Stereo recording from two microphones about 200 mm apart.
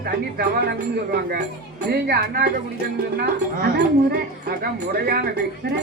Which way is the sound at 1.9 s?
55° right (ahead or behind).